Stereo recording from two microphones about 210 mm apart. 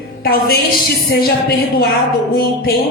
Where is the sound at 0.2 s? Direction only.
45° left (ahead or behind).